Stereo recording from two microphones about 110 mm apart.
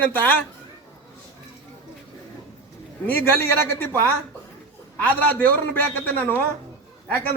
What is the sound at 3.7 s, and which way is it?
A woman's voice, 20° left (ahead or behind).